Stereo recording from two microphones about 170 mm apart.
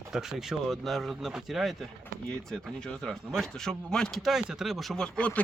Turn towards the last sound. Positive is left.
turn(degrees=5)  # may be behind; listen again after turning